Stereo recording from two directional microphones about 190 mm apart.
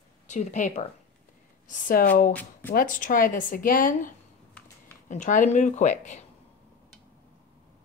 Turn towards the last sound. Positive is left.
turn(degrees=40)  # may be behind; listen again after turning